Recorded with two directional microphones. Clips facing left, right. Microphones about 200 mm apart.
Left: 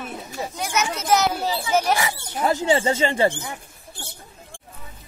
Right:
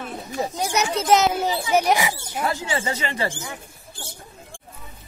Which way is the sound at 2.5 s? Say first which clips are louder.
Left 6 dB; 25° left (ahead or behind).